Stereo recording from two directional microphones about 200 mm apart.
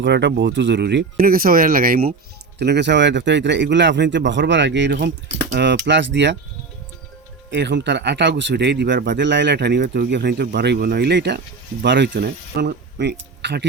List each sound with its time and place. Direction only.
0.0 s speech: 60° right (ahead or behind)
2.6 s speech: 60° right (ahead or behind)
7.5 s speech: 60° right (ahead or behind)